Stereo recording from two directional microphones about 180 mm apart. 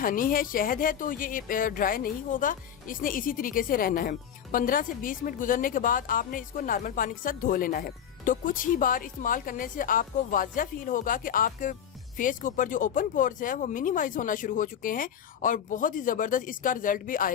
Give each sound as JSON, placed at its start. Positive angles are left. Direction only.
{"t": 0.0, "sound": "a woman's voice", "side_deg": 50}